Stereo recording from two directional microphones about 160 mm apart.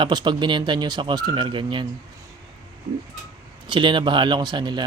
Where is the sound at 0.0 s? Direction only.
30° right (ahead or behind).